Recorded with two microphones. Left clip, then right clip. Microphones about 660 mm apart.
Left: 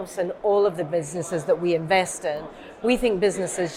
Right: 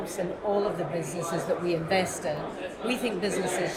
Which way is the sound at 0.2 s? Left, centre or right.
Left.